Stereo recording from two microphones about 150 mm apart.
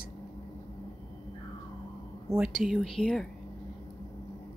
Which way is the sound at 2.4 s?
5° right (ahead or behind).